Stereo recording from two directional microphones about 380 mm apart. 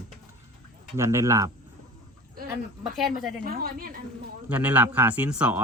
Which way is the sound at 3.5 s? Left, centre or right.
Right.